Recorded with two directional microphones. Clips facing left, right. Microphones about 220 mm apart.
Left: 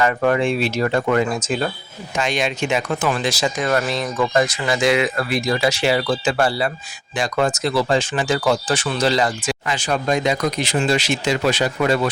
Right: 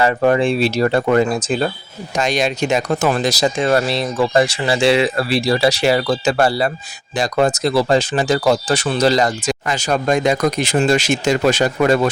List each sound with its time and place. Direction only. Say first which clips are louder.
0.0 s speech: right 3 dB; 30° right (ahead or behind); by 11.9 s 45° right (ahead or behind)